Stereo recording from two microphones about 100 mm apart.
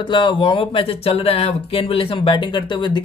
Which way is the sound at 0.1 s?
50° left (ahead or behind).